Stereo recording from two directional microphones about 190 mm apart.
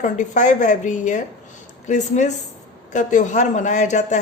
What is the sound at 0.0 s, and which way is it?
A man's voice, 40° left (ahead or behind).